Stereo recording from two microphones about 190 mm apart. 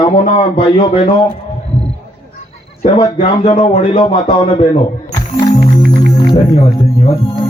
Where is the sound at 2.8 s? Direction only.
30° left (ahead or behind).